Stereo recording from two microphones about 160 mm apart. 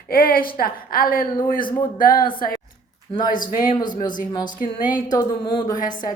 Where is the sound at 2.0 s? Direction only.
65° left (ahead or behind).